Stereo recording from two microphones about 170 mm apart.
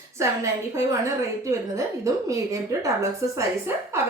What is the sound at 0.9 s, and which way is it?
Speech, 20° right (ahead or behind).